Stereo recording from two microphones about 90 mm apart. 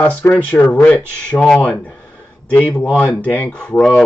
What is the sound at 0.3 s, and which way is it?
Speech, 15° left (ahead or behind).